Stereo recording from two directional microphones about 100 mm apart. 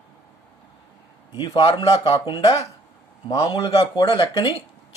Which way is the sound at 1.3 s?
55° left (ahead or behind).